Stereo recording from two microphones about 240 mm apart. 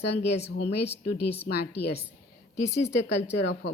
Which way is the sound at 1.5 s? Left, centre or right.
Left.